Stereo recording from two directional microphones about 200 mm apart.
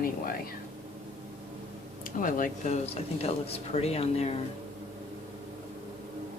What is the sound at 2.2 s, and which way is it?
Speech, 40° left (ahead or behind).